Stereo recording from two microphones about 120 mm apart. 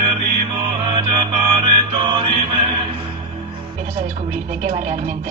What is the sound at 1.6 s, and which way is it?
Mantra, 45° right (ahead or behind).